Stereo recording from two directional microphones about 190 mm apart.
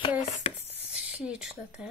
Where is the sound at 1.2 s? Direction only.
5° right (ahead or behind).